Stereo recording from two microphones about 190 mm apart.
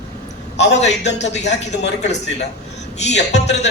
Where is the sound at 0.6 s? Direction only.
35° left (ahead or behind).